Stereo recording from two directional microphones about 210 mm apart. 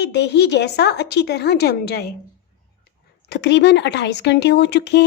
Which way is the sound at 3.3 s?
55° left (ahead or behind).